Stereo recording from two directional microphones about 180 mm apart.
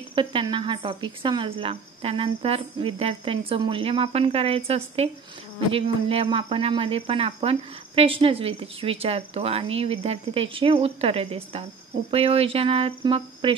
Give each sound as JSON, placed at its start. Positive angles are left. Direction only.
{"t": 0.1, "sound": "speech", "side_deg": -30}